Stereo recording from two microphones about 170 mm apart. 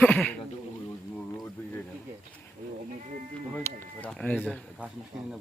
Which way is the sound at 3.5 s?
10° left (ahead or behind).